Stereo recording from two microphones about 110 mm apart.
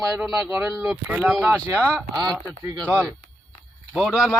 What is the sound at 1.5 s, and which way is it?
Speech, 20° right (ahead or behind).